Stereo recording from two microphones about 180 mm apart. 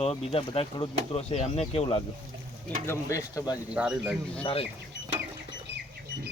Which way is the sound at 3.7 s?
5° right (ahead or behind).